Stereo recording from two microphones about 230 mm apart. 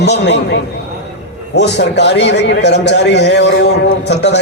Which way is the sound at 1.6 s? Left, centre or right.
Left.